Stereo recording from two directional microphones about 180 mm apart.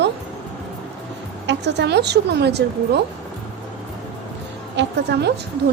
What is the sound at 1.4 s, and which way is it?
A woman's voice, 75° right (ahead or behind).